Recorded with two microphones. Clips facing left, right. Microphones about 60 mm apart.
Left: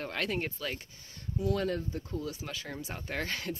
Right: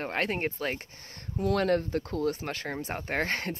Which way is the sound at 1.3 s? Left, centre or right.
Right.